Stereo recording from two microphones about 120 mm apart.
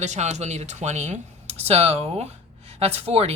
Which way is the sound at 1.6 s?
60° right (ahead or behind).